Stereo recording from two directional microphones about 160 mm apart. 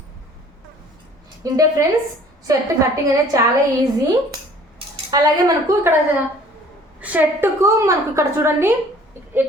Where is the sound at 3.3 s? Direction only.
20° right (ahead or behind).